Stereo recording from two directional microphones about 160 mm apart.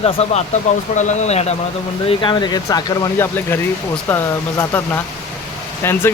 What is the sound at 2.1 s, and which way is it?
Speech, 30° left (ahead or behind).